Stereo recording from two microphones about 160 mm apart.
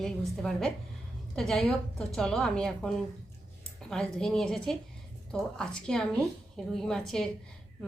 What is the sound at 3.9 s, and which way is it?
A woman's voice, 5° left (ahead or behind).